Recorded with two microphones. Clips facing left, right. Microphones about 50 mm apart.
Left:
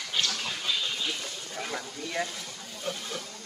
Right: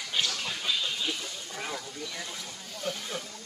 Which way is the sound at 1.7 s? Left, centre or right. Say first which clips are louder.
Left 5 dB; left.